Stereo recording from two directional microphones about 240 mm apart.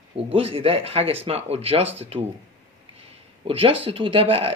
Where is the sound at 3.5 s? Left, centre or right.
Right.